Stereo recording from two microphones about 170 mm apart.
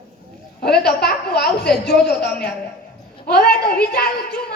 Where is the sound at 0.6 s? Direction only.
70° left (ahead or behind).